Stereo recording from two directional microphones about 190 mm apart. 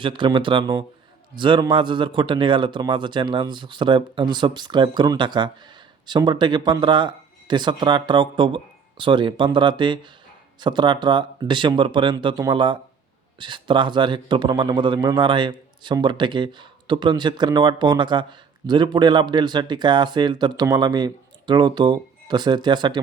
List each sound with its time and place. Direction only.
0.0 s a man's voice: 25° right (ahead or behind)